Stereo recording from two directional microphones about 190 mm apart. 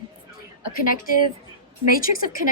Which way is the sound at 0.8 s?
45° left (ahead or behind).